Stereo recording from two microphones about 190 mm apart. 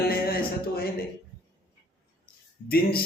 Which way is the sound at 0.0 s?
50° left (ahead or behind).